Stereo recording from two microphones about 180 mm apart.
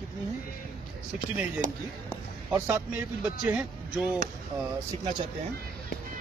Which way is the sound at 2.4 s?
10° right (ahead or behind).